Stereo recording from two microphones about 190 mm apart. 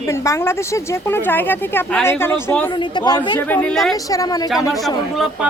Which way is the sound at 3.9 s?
20° left (ahead or behind).